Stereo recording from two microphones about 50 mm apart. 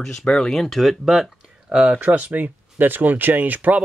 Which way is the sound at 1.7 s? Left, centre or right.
Centre.